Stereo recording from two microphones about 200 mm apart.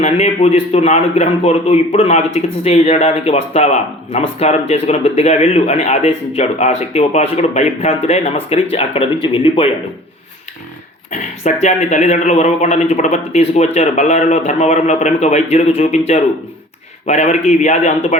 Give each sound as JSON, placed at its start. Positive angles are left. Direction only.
{"t": 0.0, "sound": "a man's voice", "side_deg": 30}
{"t": 11.1, "sound": "a man's voice", "side_deg": 35}